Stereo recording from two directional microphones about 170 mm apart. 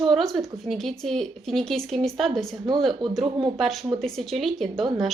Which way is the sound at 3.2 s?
30° right (ahead or behind).